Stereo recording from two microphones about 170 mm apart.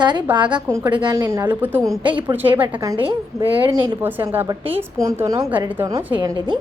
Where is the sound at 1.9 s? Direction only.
30° right (ahead or behind).